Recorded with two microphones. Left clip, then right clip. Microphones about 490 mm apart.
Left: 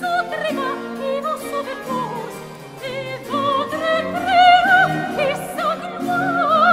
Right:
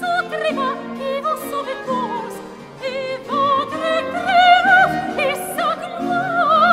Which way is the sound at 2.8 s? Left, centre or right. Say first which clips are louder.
Right 3 dB; centre.